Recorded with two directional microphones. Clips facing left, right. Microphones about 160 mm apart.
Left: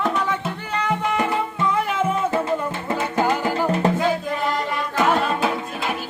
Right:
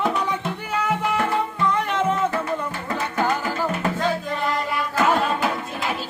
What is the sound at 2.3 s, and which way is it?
Music, 25° left (ahead or behind).